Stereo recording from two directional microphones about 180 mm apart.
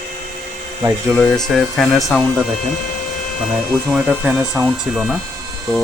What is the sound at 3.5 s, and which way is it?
Speech, 5° right (ahead or behind).